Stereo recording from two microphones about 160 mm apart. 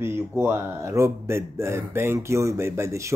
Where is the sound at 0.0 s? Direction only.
15° right (ahead or behind).